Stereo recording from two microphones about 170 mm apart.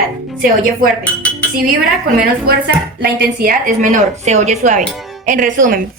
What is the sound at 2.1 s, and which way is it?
Speech, 65° right (ahead or behind).